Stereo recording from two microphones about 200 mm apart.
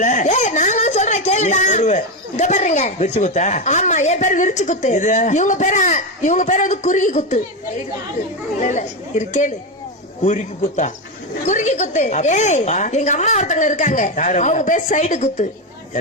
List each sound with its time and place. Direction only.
0.0 s speech: 40° left (ahead or behind)
8.6 s a woman's voice: 40° left (ahead or behind)